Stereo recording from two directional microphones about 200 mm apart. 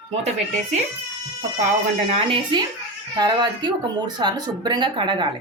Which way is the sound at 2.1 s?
25° right (ahead or behind).